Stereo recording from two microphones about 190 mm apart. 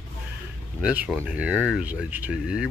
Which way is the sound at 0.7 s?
5° right (ahead or behind).